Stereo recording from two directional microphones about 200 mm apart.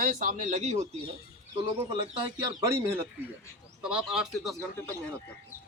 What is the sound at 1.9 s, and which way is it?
A man's voice, 20° right (ahead or behind).